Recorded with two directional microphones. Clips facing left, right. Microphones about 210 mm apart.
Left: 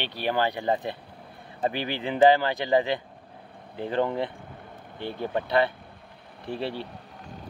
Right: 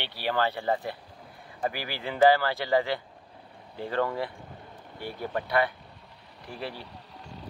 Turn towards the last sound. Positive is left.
turn(degrees=50)  # may be behind; listen again after turning